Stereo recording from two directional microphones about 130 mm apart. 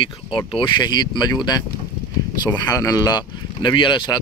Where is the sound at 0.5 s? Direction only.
40° left (ahead or behind).